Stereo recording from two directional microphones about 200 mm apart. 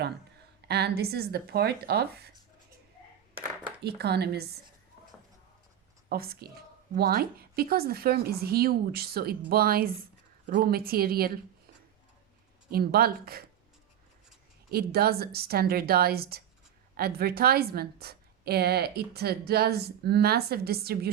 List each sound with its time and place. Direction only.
0.7 s a woman's voice: 55° right (ahead or behind)
3.8 s a woman's voice: 55° right (ahead or behind)
6.1 s a woman's voice: 50° right (ahead or behind)
12.7 s a woman's voice: 50° right (ahead or behind)
14.7 s a woman's voice: 50° right (ahead or behind)